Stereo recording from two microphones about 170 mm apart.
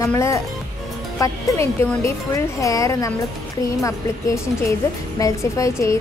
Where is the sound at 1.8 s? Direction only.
15° left (ahead or behind).